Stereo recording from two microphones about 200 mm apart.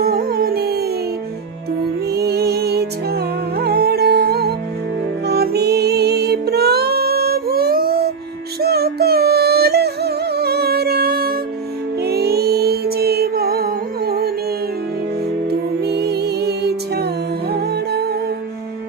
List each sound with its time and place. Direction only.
0.0 s music: 50° right (ahead or behind)
2.0 s music: 55° right (ahead or behind)
15.4 s music: 55° right (ahead or behind)